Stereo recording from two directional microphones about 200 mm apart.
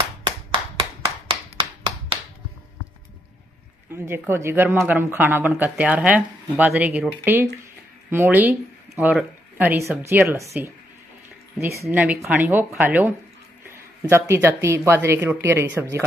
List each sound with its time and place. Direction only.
0.7 s clapping: 25° right (ahead or behind)
4.1 s speech: 10° right (ahead or behind)
11.8 s speech: 10° right (ahead or behind)